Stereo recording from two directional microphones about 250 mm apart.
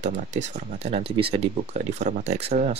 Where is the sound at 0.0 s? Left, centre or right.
Right.